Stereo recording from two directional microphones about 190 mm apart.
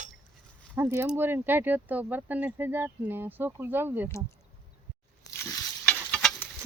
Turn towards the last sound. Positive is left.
turn(degrees=5)  # may be behind; listen again after turning